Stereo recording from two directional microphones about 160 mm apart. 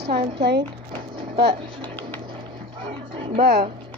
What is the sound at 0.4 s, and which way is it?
Speech, 90° right.